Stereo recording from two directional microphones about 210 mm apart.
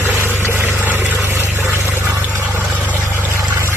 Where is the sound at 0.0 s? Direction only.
10° right (ahead or behind).